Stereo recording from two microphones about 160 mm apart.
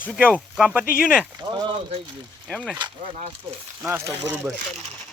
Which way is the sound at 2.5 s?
5° left (ahead or behind).